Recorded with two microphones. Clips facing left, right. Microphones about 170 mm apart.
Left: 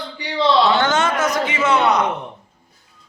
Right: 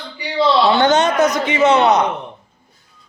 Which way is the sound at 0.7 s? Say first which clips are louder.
Right 5 dB; 20° right (ahead or behind).